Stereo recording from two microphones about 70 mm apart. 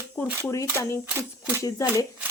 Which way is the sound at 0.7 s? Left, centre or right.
Left.